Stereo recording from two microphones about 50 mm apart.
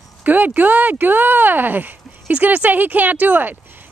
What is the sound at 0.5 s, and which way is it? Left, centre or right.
A woman's voice, right.